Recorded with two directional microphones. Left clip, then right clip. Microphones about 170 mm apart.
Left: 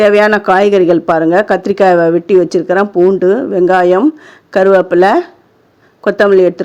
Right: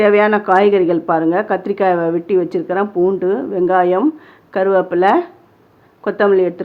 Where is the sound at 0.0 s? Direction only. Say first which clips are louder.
Left 4 dB; 45° left (ahead or behind).